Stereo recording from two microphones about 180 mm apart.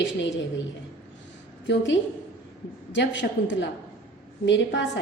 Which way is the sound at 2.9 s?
80° left.